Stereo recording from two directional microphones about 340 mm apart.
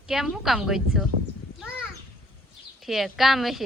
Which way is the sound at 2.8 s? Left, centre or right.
Centre.